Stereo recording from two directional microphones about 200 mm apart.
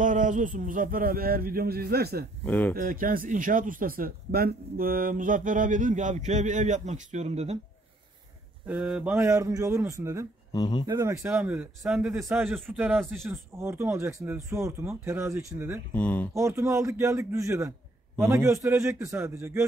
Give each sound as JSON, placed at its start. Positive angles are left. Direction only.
{"t": 0.0, "sound": "speech", "side_deg": -40}
{"t": 2.4, "sound": "speech", "side_deg": 10}
{"t": 2.7, "sound": "speech", "side_deg": -45}
{"t": 8.6, "sound": "speech", "side_deg": -5}
{"t": 10.5, "sound": "speech", "side_deg": 20}
{"t": 10.9, "sound": "speech", "side_deg": -15}
{"t": 15.9, "sound": "speech", "side_deg": 5}
{"t": 16.3, "sound": "speech", "side_deg": -15}